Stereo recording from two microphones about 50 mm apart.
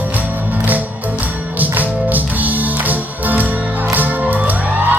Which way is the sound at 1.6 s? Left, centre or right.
Right.